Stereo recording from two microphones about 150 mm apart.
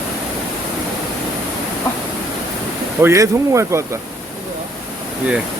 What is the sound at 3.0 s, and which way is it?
Speech, 20° right (ahead or behind).